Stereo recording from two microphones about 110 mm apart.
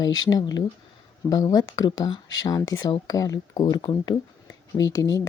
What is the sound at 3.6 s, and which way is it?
Speech, 45° left (ahead or behind).